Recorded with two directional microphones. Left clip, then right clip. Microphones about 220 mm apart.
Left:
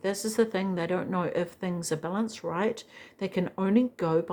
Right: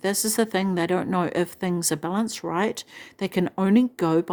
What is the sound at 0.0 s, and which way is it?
A woman's voice, 50° right (ahead or behind).